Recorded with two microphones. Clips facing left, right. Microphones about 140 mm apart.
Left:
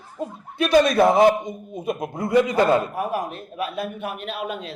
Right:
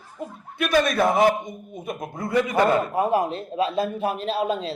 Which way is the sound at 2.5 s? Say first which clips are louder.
Left 1 dB; 25° right (ahead or behind).